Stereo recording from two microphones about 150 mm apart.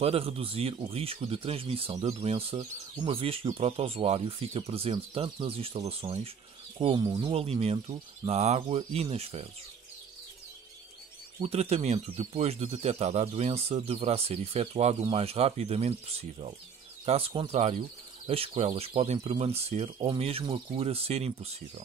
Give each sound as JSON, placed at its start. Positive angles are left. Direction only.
{"t": 0.0, "sound": "speech", "side_deg": -40}
{"t": 2.5, "sound": "speech", "side_deg": -30}
{"t": 7.0, "sound": "speech", "side_deg": -30}
{"t": 7.2, "sound": "speech", "side_deg": -40}
{"t": 11.4, "sound": "speech", "side_deg": -45}